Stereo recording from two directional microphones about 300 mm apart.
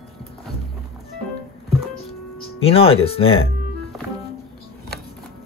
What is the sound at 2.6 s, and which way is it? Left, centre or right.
Speech, centre.